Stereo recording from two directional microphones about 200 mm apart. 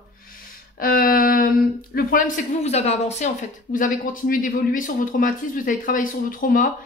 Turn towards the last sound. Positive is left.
turn(degrees=45)  # may be behind; listen again after turning